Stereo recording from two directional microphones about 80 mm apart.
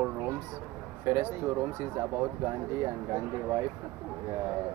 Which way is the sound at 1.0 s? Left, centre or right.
Right.